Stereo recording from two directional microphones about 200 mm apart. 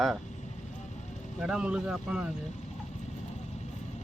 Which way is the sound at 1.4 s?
5° right (ahead or behind).